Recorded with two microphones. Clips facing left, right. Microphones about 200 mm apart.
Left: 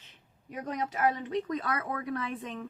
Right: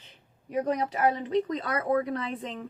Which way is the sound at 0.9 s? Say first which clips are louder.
Left 1 dB; 35° right (ahead or behind).